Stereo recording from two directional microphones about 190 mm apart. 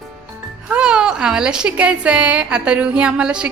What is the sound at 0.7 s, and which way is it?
A woman's voice, 5° right (ahead or behind).